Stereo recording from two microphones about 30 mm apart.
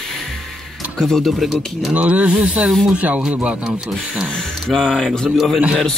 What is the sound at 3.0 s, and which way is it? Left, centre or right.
Speech, right.